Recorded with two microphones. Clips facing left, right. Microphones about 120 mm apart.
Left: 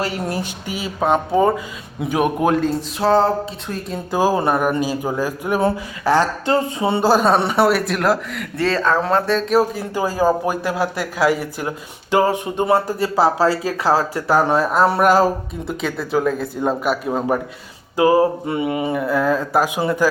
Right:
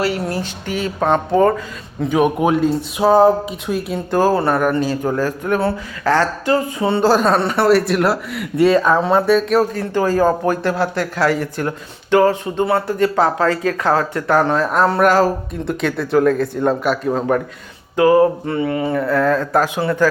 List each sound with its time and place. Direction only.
0.0 s speech: 15° left (ahead or behind); by 4.0 s 5° right (ahead or behind)
4.1 s speech: 10° left (ahead or behind)
6.4 s speech: 25° left (ahead or behind); by 9.4 s 10° right (ahead or behind)
9.5 s speech: 5° left (ahead or behind)
13.7 s speech: 30° left (ahead or behind)
14.3 s speech: 10° left (ahead or behind)